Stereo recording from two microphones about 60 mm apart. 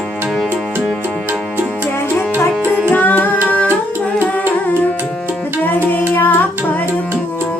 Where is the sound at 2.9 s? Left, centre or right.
Left.